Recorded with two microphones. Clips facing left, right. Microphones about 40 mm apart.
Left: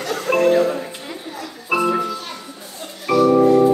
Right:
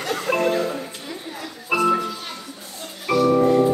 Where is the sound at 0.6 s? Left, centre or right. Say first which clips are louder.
Left 6 dB; centre.